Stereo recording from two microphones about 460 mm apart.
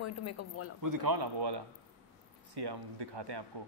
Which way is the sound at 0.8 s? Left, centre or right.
Right.